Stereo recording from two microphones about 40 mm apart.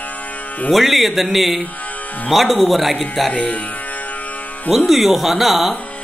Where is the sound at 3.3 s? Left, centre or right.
Left.